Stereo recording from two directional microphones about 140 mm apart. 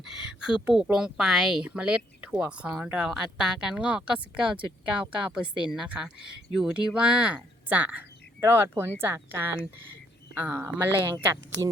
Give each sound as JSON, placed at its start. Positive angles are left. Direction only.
{"t": 0.0, "sound": "speech", "side_deg": -5}